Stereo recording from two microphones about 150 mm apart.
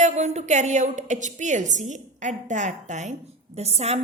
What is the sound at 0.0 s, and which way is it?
A woman's voice, 50° right (ahead or behind).